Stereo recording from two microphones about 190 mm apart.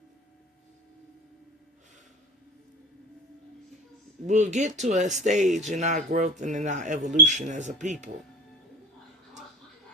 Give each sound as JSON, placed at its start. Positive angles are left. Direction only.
{"t": 4.3, "sound": "speech", "side_deg": -40}